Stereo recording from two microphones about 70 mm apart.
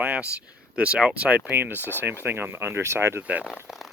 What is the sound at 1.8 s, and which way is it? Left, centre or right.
Speech, left.